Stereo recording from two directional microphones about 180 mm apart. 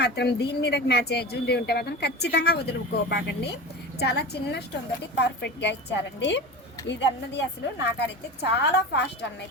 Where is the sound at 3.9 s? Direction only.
65° left (ahead or behind).